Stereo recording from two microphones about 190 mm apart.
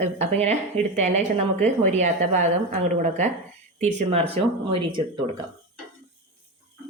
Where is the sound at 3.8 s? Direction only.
35° right (ahead or behind).